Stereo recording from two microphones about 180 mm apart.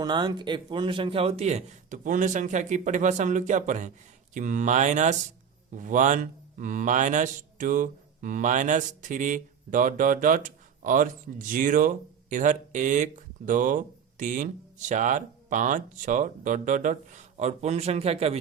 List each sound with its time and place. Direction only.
0.0 s a man's voice: 25° right (ahead or behind)